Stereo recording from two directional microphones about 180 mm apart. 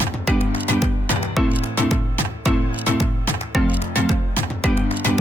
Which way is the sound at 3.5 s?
Centre (ahead or behind).